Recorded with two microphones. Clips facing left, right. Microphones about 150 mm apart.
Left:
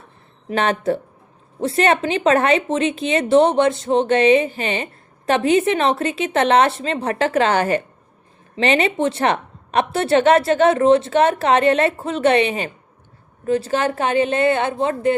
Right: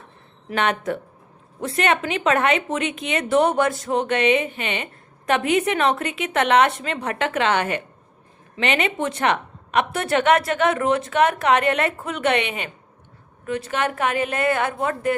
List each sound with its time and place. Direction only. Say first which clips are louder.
0.4 s a woman's voice: left 4 dB; 30° left (ahead or behind)